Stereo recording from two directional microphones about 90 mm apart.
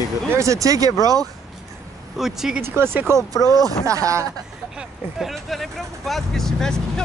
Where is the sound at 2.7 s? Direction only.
25° right (ahead or behind).